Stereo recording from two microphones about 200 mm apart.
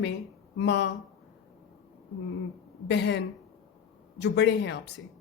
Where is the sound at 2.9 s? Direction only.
60° left (ahead or behind).